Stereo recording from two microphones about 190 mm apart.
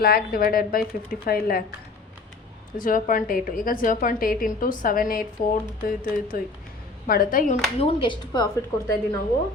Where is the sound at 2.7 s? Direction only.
45° left (ahead or behind).